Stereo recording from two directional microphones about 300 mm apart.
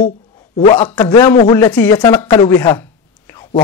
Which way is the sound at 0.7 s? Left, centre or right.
Centre.